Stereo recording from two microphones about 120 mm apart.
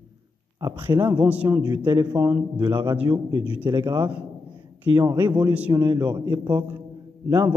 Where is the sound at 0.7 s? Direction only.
20° right (ahead or behind).